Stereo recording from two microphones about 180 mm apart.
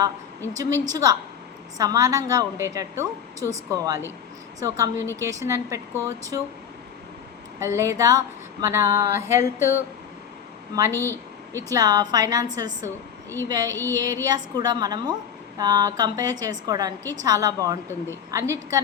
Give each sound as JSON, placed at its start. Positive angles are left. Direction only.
{"t": 0.5, "sound": "a woman's voice", "side_deg": -20}
{"t": 7.6, "sound": "a woman's voice", "side_deg": -15}
{"t": 10.9, "sound": "a woman's voice", "side_deg": 10}
{"t": 11.5, "sound": "a woman's voice", "side_deg": -20}